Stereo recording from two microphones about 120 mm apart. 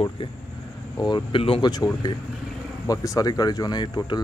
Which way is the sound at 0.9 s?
35° left (ahead or behind).